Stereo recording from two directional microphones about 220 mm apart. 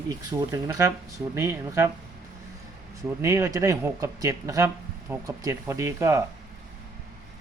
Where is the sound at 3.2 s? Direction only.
15° right (ahead or behind).